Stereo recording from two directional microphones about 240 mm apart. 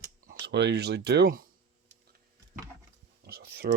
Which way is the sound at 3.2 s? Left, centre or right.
Right.